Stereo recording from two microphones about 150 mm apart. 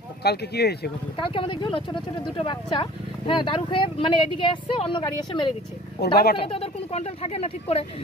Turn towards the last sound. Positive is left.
turn(degrees=40)  # may be behind; listen again after turning